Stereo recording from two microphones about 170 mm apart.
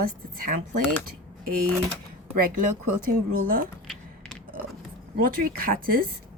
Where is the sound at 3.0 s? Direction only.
55° right (ahead or behind).